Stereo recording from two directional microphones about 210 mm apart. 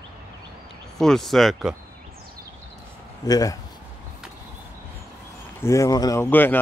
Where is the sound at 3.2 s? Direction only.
15° left (ahead or behind).